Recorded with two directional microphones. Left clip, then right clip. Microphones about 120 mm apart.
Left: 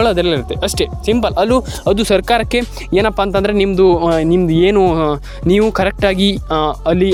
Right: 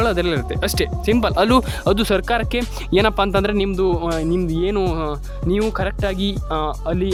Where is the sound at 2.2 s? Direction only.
30° left (ahead or behind).